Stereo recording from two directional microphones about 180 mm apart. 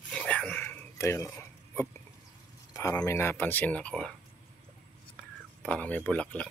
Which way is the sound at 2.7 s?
15° left (ahead or behind).